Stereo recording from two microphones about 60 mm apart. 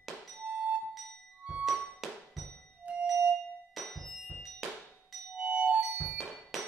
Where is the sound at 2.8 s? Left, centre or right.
Centre.